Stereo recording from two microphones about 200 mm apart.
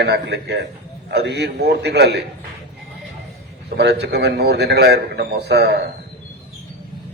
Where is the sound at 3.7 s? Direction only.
55° right (ahead or behind).